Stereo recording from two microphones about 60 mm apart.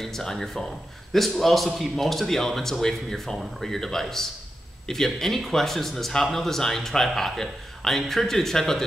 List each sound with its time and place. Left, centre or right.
0.0 s speech: centre